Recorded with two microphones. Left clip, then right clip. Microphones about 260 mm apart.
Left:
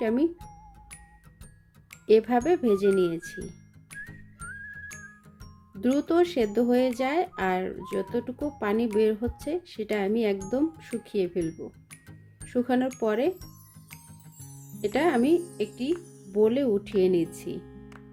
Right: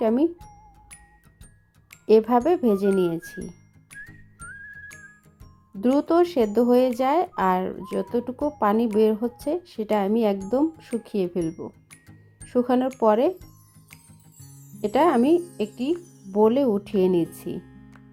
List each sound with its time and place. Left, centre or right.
0.0 s speech: centre
1.9 s music: centre
5.8 s speech: centre
14.7 s speech: centre
16.0 s music: centre
16.3 s speech: centre